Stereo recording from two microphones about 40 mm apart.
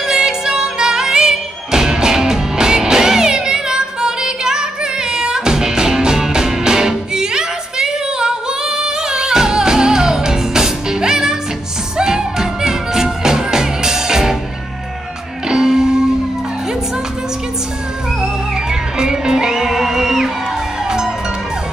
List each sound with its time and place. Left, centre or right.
0.0 s music: centre
15.4 s music: centre
18.2 s music: centre